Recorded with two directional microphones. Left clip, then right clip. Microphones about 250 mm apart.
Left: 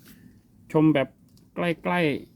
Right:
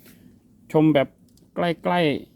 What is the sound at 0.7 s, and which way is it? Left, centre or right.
A man's voice, centre.